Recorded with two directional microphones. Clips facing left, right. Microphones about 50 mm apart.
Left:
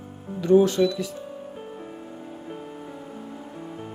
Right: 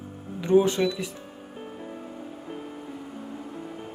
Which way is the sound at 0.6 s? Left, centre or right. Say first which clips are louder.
Left 2 dB; right.